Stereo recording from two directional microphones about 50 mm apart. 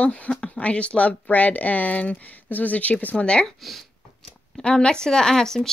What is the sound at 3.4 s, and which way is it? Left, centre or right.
Speech, centre.